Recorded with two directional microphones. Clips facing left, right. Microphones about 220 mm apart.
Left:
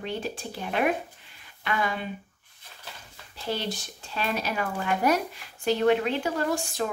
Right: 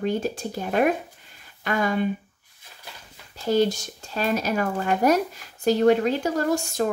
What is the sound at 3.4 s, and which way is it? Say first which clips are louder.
Speech: right 10 dB; 45° right (ahead or behind).